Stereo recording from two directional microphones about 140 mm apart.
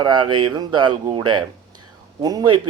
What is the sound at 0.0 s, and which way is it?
Speech, 35° right (ahead or behind).